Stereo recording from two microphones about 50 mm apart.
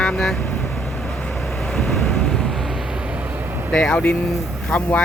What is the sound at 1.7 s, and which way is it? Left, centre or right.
Waves, centre.